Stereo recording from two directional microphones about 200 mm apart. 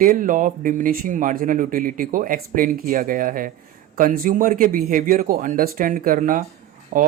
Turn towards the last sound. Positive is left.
turn(degrees=-40)  # may be behind; listen again after turning